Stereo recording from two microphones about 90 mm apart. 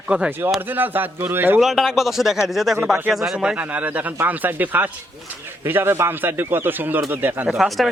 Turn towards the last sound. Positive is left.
turn(degrees=0)  # may be behind; listen again after turning